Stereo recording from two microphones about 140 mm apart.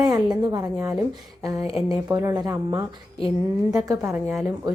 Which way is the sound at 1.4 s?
25° right (ahead or behind).